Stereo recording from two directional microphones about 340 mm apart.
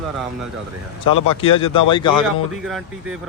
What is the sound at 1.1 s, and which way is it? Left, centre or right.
A man's voice, centre.